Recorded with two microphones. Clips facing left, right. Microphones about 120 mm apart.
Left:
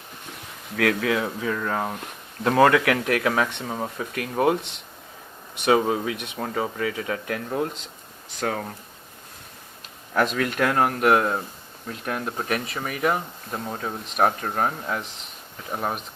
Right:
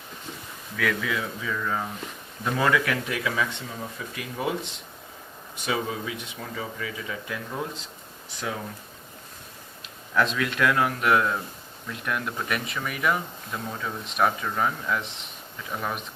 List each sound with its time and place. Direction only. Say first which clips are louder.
0.8 s speech: left 5 dB; 70° left (ahead or behind)
1.4 s speech: left 3 dB; 60° left (ahead or behind)
5.6 s speech: left 8 dB; 80° left; by 8.6 s 60° left (ahead or behind)
10.2 s speech: left 2 dB; 50° left (ahead or behind)